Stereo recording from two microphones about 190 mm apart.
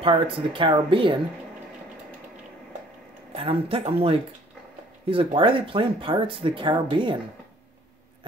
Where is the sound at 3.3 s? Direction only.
30° right (ahead or behind).